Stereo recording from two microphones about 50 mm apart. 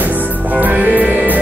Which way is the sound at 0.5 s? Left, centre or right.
Right.